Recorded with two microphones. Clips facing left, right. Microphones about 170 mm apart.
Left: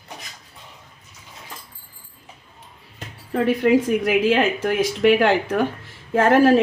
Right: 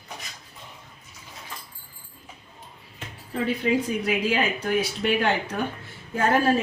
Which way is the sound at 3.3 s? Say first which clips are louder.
Left 7 dB; 70° left (ahead or behind).